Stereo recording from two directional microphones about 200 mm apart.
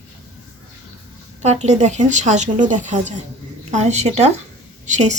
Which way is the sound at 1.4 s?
35° right (ahead or behind).